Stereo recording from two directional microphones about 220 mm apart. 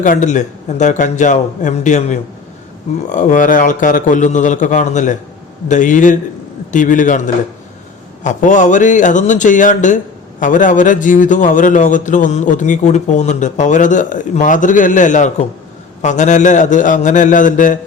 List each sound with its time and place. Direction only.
0.0 s a man's voice: 35° left (ahead or behind)
8.2 s a man's voice: 35° left (ahead or behind)